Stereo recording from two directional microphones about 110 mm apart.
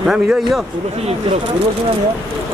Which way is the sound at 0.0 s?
5° right (ahead or behind).